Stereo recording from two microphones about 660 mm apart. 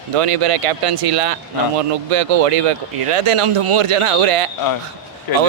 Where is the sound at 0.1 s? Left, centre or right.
Right.